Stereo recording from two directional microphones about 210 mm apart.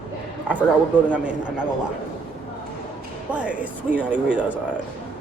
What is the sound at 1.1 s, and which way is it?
Speech, 5° right (ahead or behind).